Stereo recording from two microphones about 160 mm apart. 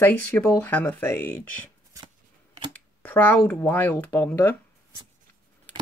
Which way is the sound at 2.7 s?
10° left (ahead or behind).